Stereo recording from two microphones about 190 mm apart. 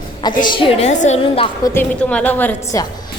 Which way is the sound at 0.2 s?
25° left (ahead or behind).